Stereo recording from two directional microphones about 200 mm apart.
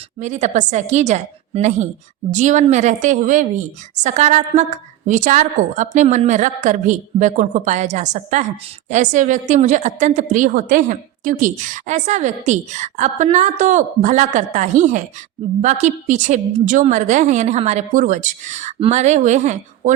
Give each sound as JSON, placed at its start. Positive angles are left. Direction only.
{"t": 0.2, "sound": "a woman's voice", "side_deg": -35}